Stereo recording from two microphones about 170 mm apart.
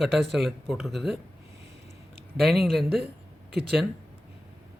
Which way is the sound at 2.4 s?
Centre (ahead or behind).